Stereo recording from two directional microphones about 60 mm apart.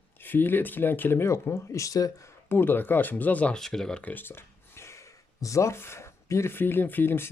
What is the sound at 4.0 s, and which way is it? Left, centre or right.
Speech, left.